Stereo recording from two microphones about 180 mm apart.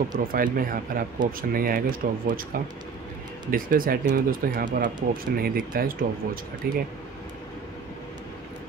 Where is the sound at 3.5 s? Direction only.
50° right (ahead or behind).